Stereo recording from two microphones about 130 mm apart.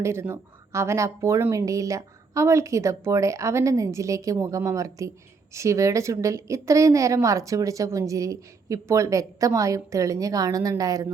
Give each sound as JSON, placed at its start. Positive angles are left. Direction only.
{"t": 0.0, "sound": "a woman's voice", "side_deg": -20}